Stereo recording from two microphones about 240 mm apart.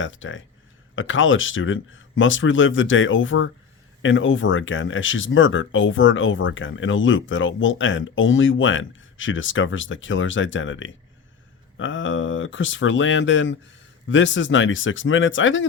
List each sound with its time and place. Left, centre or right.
0.0 s speech: left